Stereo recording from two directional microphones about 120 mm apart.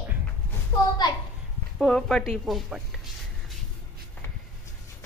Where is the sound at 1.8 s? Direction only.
5° left (ahead or behind).